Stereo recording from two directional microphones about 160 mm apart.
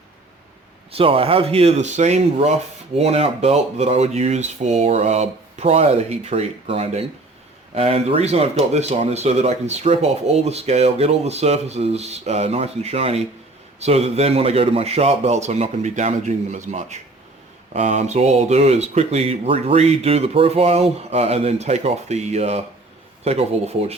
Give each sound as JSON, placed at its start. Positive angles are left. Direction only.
{"t": 0.9, "sound": "speech", "side_deg": -35}